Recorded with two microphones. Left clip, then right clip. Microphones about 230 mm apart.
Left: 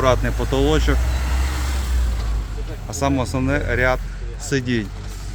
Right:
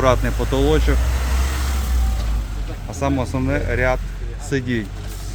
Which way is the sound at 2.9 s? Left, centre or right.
Centre.